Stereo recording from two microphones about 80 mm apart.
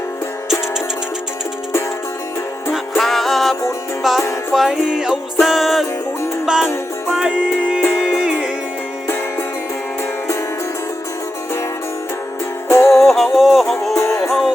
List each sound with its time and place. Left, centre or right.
2.7 s music: centre
7.8 s music: left
8.2 s music: centre
12.6 s music: left
13.0 s music: centre
13.9 s music: left
14.3 s music: centre